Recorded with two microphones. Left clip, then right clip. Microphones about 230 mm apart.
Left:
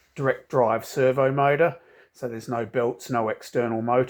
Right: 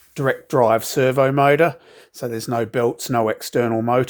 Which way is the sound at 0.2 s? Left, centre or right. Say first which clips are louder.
Right 5 dB; right.